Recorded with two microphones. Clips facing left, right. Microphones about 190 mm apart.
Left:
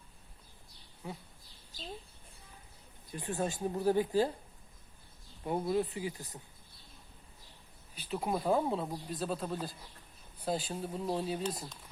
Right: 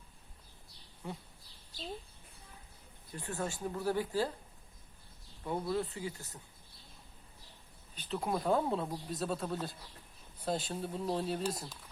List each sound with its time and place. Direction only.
1.0 s speech: 5° left (ahead or behind)
3.1 s speech: 20° left (ahead or behind)
5.5 s speech: 20° left (ahead or behind)
7.9 s speech: 10° left (ahead or behind)